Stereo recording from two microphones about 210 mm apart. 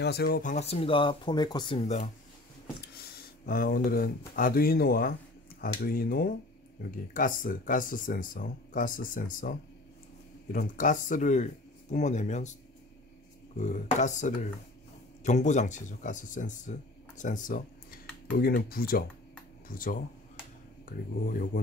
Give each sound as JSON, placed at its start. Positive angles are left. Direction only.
{"t": 0.0, "sound": "speech", "side_deg": 50}
{"t": 3.0, "sound": "a sound", "side_deg": 45}
{"t": 4.4, "sound": "speech", "side_deg": 45}
{"t": 13.6, "sound": "speech", "side_deg": 35}